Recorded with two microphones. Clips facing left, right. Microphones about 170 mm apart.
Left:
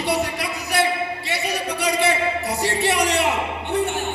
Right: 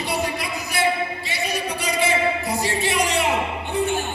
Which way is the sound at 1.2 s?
70° left (ahead or behind).